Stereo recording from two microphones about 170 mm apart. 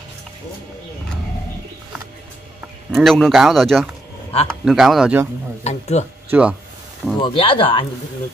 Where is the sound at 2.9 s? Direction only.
Centre (ahead or behind).